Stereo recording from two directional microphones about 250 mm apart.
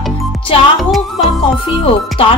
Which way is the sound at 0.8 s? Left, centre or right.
Centre.